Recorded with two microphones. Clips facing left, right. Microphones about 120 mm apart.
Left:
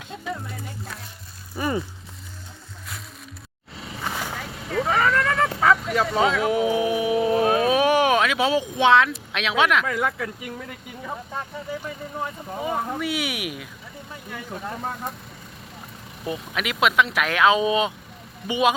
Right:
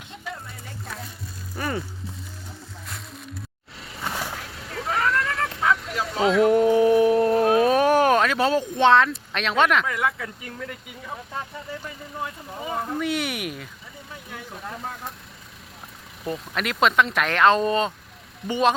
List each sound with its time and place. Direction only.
1.5 s a sound: 15° left (ahead or behind)
3.8 s vehicle: centre (ahead or behind)
5.4 s vehicle: 85° left
5.7 s vehicle: centre (ahead or behind)
6.1 s a sound: centre (ahead or behind)
11.3 s speech: centre (ahead or behind)
16.2 s speech: centre (ahead or behind)